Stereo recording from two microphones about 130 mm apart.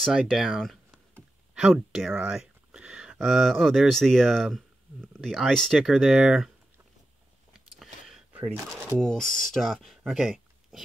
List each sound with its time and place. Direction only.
0.0 s speech: centre (ahead or behind)
7.5 s vehicle: 5° right (ahead or behind)
8.4 s speech: 20° right (ahead or behind)
9.0 s speech: 5° left (ahead or behind)